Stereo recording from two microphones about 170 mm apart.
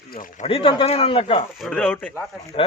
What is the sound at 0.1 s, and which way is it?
Speech, 55° left (ahead or behind).